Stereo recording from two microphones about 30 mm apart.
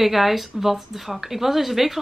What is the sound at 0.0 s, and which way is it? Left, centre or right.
A woman's voice, centre.